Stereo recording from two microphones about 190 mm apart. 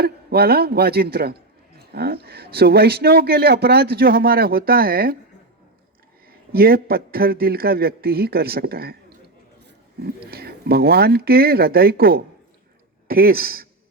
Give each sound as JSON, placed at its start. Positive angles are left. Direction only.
{"t": 0.0, "sound": "speech", "side_deg": -55}
{"t": 6.5, "sound": "speech", "side_deg": -55}